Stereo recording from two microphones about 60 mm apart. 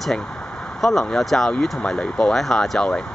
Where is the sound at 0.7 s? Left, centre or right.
Centre.